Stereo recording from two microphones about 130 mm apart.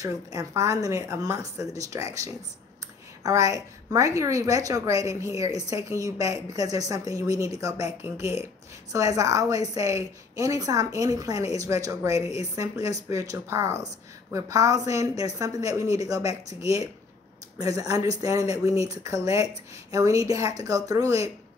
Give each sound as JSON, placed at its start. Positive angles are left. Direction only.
{"t": 0.0, "sound": "a woman's voice", "side_deg": -25}